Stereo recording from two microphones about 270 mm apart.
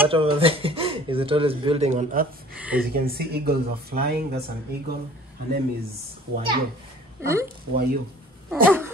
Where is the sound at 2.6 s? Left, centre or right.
Centre.